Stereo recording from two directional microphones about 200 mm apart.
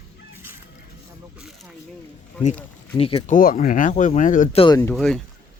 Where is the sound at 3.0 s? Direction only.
30° left (ahead or behind).